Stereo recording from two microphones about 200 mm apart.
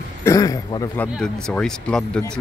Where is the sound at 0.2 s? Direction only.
15° left (ahead or behind).